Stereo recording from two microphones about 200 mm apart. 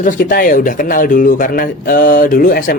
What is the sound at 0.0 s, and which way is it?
Speech, 45° left (ahead or behind).